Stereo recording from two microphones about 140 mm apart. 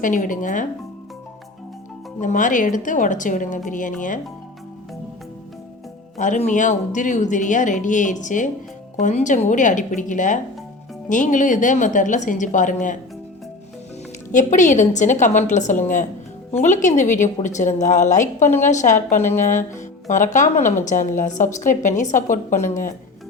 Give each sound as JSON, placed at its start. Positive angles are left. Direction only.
{"t": 0.0, "sound": "a woman's voice", "side_deg": 70}
{"t": 2.2, "sound": "a woman's voice", "side_deg": 65}
{"t": 6.1, "sound": "speech", "side_deg": 60}
{"t": 14.3, "sound": "speech", "side_deg": 60}